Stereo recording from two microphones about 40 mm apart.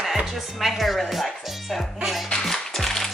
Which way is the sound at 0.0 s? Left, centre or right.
Centre.